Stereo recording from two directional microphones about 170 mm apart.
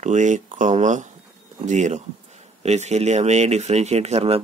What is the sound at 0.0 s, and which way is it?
Speech, 45° right (ahead or behind).